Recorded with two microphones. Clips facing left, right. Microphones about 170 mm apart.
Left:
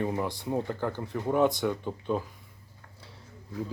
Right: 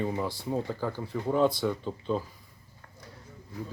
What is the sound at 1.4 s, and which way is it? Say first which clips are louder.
Speech: even; 15° left (ahead or behind).